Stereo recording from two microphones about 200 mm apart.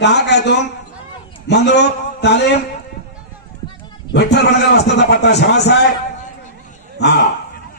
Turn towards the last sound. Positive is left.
turn(degrees=60)  # may be behind; listen again after turning